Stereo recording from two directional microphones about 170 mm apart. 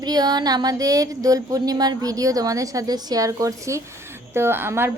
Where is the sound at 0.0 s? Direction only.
25° right (ahead or behind).